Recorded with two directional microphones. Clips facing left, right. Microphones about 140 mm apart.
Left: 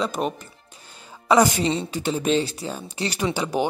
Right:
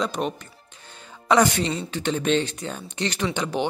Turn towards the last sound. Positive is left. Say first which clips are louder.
# left 2 dB
turn(degrees=10)  # may be behind; listen again after turning